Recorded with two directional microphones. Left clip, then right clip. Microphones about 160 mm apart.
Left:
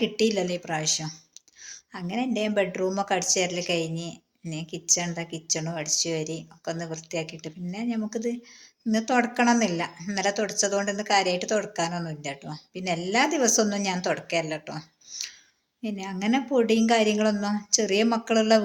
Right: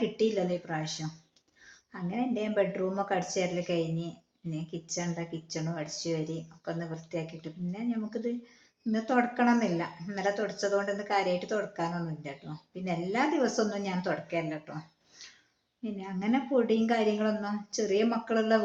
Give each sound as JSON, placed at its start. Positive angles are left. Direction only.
{"t": 0.2, "sound": "speech", "side_deg": 30}
{"t": 15.8, "sound": "speech", "side_deg": 30}